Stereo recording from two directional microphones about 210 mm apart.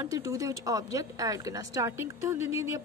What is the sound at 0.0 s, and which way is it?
Speech, 15° right (ahead or behind).